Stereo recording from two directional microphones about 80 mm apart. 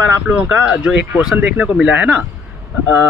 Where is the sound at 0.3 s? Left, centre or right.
Centre.